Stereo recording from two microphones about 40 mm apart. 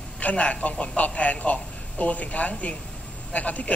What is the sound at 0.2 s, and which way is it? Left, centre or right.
Speech, left.